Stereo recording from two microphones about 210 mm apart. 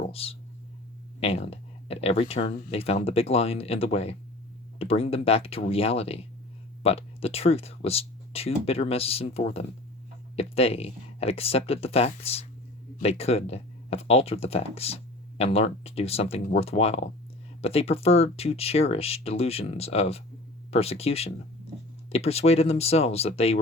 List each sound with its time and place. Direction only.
0.0 s speech: 25° left (ahead or behind)